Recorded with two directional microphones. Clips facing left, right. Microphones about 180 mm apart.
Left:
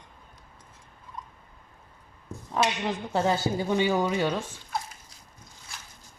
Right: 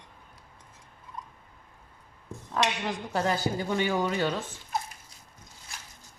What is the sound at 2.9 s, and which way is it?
Speech, 25° left (ahead or behind).